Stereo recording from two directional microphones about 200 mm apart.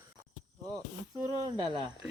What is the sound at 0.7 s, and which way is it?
Speech, 15° right (ahead or behind).